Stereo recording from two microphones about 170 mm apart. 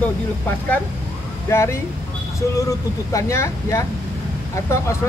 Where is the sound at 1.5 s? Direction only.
15° left (ahead or behind).